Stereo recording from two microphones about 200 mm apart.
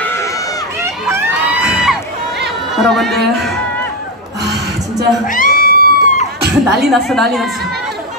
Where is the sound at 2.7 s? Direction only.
Centre (ahead or behind).